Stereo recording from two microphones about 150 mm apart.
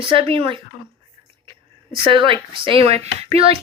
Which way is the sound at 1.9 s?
35° right (ahead or behind).